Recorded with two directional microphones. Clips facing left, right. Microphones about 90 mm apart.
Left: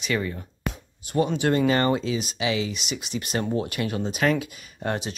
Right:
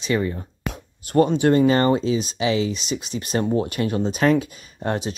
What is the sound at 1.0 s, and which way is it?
Speech, 50° right (ahead or behind).